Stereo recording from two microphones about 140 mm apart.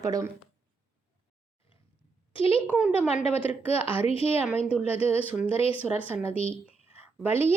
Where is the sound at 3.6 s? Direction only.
40° left (ahead or behind).